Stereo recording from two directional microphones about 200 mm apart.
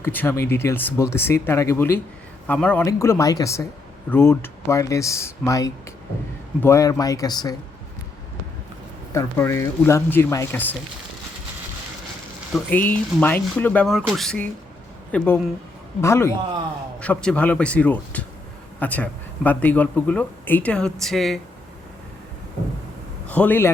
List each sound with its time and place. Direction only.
0.0 s speech: 10° left (ahead or behind)
9.1 s speech: 15° left (ahead or behind)
12.5 s speech: 10° left (ahead or behind)
23.3 s speech: 10° left (ahead or behind)